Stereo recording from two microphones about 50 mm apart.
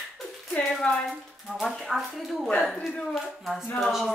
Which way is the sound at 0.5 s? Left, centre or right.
Centre.